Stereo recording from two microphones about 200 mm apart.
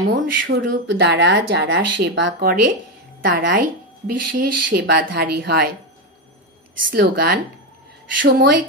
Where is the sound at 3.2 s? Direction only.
50° right (ahead or behind).